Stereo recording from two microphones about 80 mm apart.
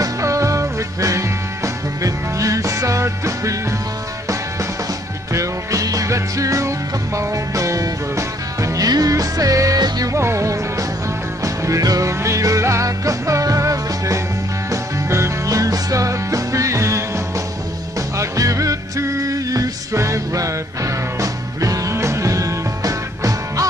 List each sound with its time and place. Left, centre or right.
0.0 s music: right
5.3 s music: right
10.1 s music: right